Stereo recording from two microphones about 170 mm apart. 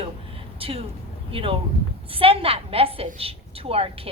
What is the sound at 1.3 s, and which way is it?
A woman's voice, 30° right (ahead or behind).